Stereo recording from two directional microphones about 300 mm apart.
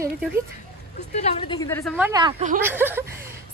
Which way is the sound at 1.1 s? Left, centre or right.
Left.